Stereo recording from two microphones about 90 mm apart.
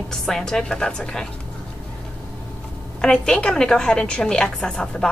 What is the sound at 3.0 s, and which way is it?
A woman's voice, 10° left (ahead or behind).